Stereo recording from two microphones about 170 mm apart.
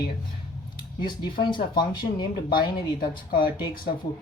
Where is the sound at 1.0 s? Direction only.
25° left (ahead or behind).